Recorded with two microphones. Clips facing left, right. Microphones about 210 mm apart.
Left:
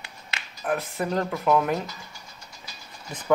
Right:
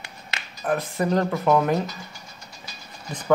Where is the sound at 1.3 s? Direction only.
35° right (ahead or behind).